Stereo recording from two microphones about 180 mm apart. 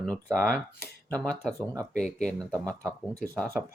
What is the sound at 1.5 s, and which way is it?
Speech, 20° right (ahead or behind).